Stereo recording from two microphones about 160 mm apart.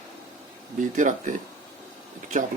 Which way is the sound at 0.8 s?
50° right (ahead or behind).